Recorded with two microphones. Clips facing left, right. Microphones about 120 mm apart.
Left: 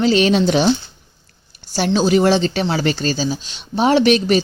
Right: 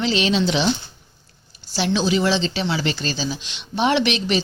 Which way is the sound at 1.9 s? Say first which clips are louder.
Left 6 dB; 45° left (ahead or behind).